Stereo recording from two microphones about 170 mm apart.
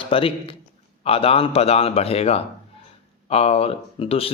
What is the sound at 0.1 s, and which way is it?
A man's voice, 30° left (ahead or behind).